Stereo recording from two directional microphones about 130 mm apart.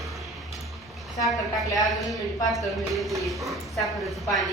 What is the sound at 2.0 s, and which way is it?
Speech, centre (ahead or behind).